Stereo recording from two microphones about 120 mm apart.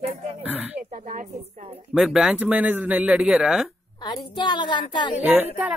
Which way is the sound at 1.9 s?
5° right (ahead or behind).